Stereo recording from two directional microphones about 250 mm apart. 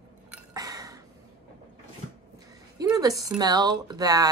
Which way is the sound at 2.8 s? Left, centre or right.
Centre.